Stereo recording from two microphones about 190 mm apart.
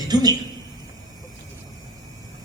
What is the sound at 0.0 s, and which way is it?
Speech, 20° right (ahead or behind).